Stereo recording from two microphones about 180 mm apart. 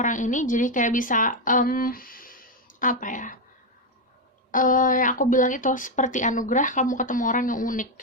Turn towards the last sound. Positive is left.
turn(degrees=45)  # may be behind; listen again after turning